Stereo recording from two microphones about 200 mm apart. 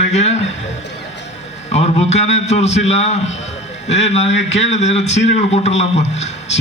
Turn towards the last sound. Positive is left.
turn(degrees=35)  # may be behind; listen again after turning